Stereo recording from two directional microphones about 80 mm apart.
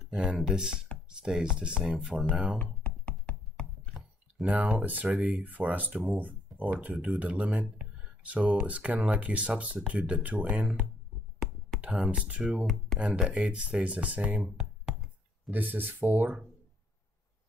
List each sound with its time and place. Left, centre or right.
0.1 s speech: centre
2.6 s a sound: centre
4.5 s speech: centre